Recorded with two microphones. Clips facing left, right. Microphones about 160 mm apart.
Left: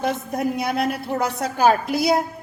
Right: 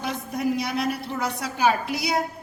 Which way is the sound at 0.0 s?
55° left (ahead or behind).